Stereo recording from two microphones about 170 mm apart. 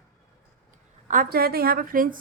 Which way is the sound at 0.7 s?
50° right (ahead or behind).